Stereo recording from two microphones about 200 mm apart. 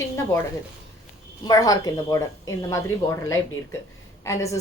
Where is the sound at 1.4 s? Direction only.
15° left (ahead or behind).